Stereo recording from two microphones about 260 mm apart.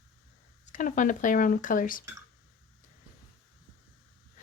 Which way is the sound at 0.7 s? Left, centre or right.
Left.